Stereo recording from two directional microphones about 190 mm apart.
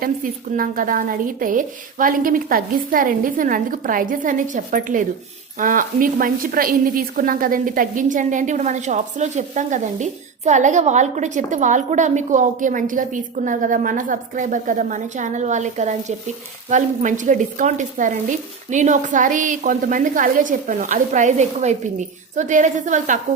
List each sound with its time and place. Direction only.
0.5 s a woman's voice: 45° right (ahead or behind)